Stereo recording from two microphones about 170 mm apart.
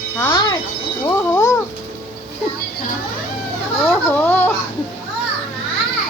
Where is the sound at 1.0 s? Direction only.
20° left (ahead or behind).